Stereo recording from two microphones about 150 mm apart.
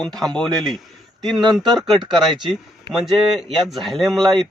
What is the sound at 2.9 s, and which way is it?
A man's voice, centre (ahead or behind).